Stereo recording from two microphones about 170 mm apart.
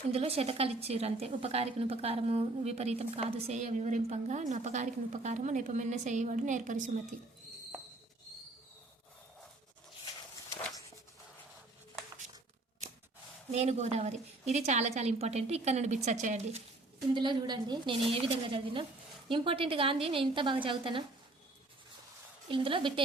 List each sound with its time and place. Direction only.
0.1 s a woman's voice: 35° right (ahead or behind)
13.5 s a woman's voice: 40° right (ahead or behind)
17.2 s a woman's voice: 25° right (ahead or behind)
22.4 s a woman's voice: 30° right (ahead or behind)